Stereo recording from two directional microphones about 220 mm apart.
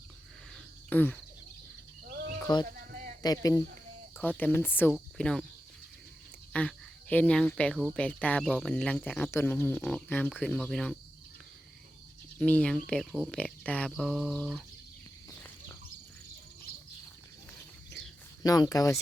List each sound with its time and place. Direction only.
0.5 s cricket: 10° left (ahead or behind)
2.6 s a sound: 40° right (ahead or behind)
3.2 s speech: 15° left (ahead or behind)
6.5 s speech: 5° left (ahead or behind)
12.4 s speech: 5° left (ahead or behind)
15.3 s a sound: 10° left (ahead or behind)
18.4 s speech: 15° left (ahead or behind)